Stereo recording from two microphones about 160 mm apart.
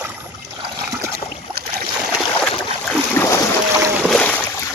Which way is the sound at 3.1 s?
15° left (ahead or behind).